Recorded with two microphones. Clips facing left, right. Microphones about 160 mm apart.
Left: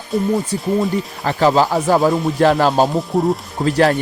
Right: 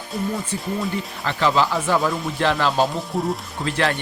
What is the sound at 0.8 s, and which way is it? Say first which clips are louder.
Speech: left 7 dB; 40° left (ahead or behind).